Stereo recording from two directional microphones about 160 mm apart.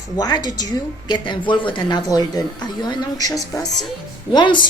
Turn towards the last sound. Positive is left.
turn(degrees=30)  # may be behind; listen again after turning